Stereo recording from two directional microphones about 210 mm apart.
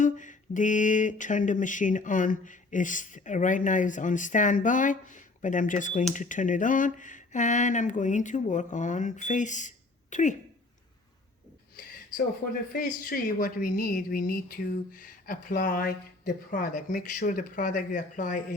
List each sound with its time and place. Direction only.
0.0 s speech: 35° left (ahead or behind)
12.7 s speech: 40° left (ahead or behind)